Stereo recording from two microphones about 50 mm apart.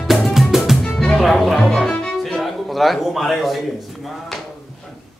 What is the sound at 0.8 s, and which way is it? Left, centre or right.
Music, centre.